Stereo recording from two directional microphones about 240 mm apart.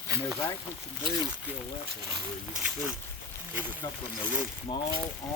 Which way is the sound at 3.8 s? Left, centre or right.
Centre.